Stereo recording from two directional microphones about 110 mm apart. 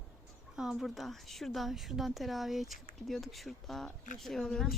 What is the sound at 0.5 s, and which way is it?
Speech, 5° right (ahead or behind).